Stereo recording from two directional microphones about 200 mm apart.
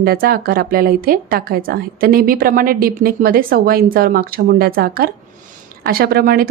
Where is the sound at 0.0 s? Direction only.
50° right (ahead or behind).